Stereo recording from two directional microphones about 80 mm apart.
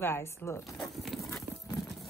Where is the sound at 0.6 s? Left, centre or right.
Centre.